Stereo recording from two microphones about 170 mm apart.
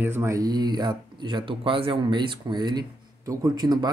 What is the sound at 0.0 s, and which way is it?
Speech, 15° right (ahead or behind).